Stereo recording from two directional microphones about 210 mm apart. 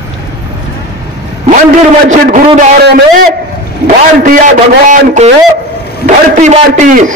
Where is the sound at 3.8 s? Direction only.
40° right (ahead or behind).